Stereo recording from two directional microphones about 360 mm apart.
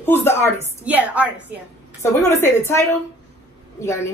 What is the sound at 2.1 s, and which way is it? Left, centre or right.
Speech, centre.